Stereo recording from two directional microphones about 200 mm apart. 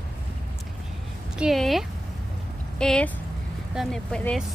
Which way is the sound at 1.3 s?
Centre (ahead or behind).